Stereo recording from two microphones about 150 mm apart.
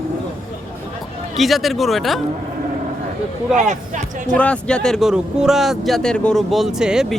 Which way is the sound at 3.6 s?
55° right (ahead or behind).